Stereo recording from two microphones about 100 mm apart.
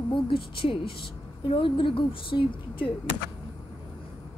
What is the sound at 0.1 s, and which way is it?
A woman's voice, 60° left (ahead or behind).